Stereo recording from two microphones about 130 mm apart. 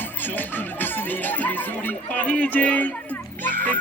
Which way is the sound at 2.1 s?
10° left (ahead or behind).